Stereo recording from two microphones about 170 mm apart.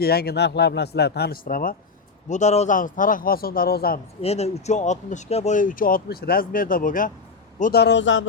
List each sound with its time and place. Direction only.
0.0 s speech: 65° left (ahead or behind)
2.3 s speech: 40° left (ahead or behind); by 4.0 s 65° left (ahead or behind)
4.2 s speech: 35° left (ahead or behind); by 7.1 s 55° left (ahead or behind)
7.6 s a man's voice: 70° left (ahead or behind); by 8.3 s 90° left